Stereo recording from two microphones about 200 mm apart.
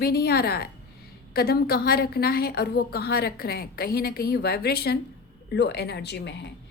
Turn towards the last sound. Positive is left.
turn(degrees=55)  # may be behind; listen again after turning